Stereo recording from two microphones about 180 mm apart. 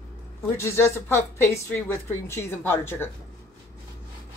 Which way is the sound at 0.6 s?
15° left (ahead or behind).